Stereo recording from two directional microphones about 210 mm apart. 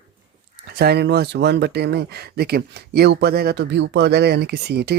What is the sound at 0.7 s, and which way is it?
Speech, 50° right (ahead or behind).